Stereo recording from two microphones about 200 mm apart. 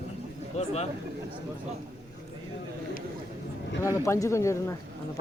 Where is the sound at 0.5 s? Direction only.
30° left (ahead or behind).